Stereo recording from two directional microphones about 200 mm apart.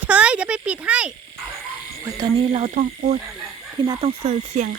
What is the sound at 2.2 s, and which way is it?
Speech, 25° right (ahead or behind).